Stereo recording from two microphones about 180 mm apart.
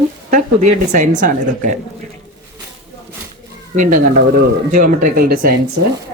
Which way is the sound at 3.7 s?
45° right (ahead or behind).